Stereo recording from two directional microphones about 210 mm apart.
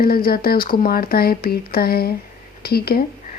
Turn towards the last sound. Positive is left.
turn(degrees=50)  # may be behind; listen again after turning